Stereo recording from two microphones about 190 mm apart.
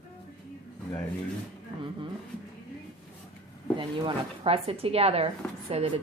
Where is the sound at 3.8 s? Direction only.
30° right (ahead or behind).